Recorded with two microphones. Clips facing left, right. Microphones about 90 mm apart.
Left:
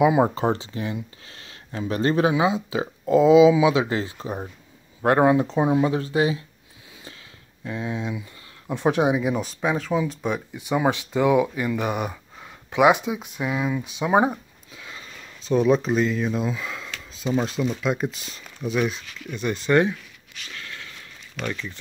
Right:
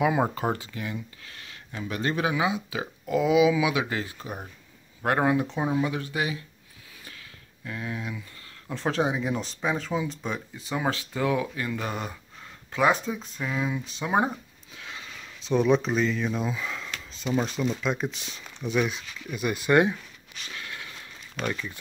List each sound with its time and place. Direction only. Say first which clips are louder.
0.0 s speech: left 6 dB; 15° left (ahead or behind)
0.3 s speech: left 5 dB; 25° left (ahead or behind)
7.6 s speech: left 5 dB; 20° left (ahead or behind); by 20.4 s 15° right (ahead or behind)
20.5 s sniff: even; 20° right (ahead or behind)
21.5 s speech: left 1 dB; 10° right (ahead or behind)